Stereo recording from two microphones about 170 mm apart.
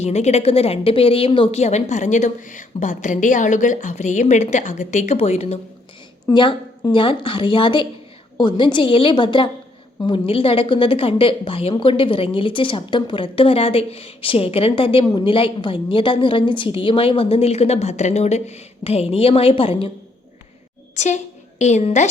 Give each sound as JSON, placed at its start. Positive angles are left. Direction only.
{"t": 0.0, "sound": "speech", "side_deg": 40}
{"t": 6.2, "sound": "a woman's voice", "side_deg": 30}
{"t": 20.9, "sound": "a woman's voice", "side_deg": 40}